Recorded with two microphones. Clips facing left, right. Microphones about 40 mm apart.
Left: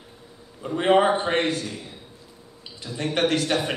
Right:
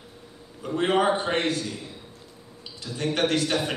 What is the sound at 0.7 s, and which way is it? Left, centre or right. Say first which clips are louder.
Speech: left 3 dB; centre.